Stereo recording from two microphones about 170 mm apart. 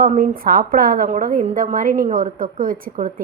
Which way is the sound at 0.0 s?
50° right (ahead or behind).